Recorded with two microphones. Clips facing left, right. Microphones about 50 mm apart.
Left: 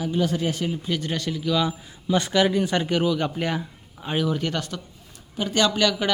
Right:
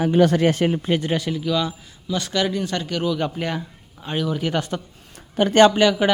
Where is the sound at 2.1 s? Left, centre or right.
Left.